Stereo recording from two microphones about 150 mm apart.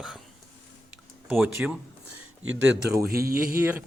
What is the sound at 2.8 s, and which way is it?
Speech, 90° right.